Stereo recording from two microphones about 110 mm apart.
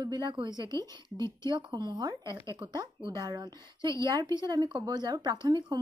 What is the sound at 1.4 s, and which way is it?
Speech, 40° right (ahead or behind).